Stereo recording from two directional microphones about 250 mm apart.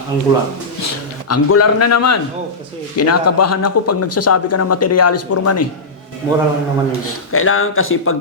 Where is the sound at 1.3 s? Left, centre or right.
Left.